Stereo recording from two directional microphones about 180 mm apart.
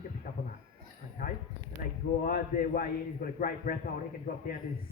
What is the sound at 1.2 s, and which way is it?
A man's voice, 50° left (ahead or behind).